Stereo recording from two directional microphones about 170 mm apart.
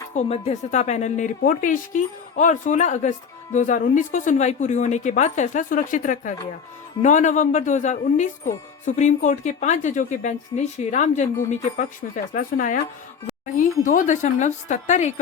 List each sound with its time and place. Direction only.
0.1 s speech: 40° left (ahead or behind)